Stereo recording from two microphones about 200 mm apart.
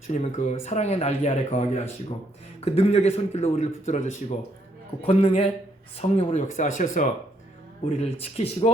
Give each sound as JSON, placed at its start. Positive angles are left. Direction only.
{"t": 0.1, "sound": "a man's voice", "side_deg": 35}